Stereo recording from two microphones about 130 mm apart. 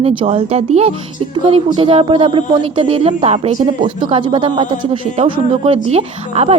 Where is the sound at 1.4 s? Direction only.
40° right (ahead or behind).